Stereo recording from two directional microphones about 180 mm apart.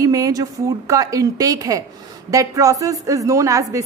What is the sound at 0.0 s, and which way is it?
A woman's voice, 20° right (ahead or behind).